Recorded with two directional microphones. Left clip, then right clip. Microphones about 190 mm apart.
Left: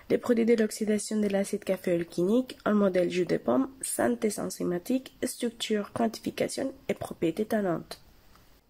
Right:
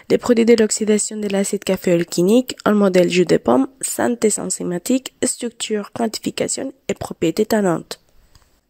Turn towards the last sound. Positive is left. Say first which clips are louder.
# right 11 dB
turn(degrees=-55)  # may be behind; listen again after turning